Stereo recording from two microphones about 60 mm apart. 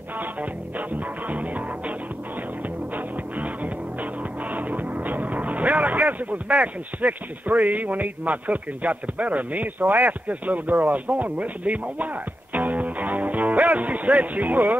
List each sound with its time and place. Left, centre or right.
0.2 s music: right
3.3 s music: right